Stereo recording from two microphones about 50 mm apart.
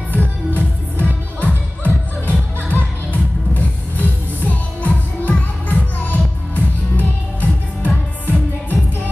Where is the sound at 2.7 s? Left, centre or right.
Left.